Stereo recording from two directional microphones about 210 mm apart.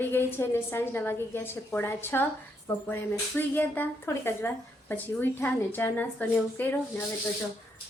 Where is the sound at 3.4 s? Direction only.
10° left (ahead or behind).